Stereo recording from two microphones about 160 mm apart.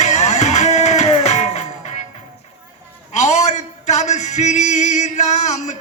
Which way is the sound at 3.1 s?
45° left (ahead or behind).